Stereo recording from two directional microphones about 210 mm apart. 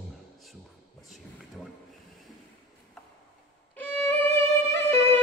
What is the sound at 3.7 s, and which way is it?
Violin, 10° left (ahead or behind).